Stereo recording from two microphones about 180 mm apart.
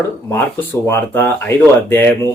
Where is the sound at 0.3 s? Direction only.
15° left (ahead or behind).